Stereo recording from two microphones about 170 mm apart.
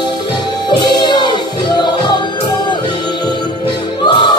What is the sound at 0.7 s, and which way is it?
Music, 25° left (ahead or behind).